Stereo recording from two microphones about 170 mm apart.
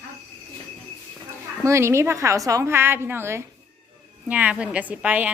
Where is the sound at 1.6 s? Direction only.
15° right (ahead or behind).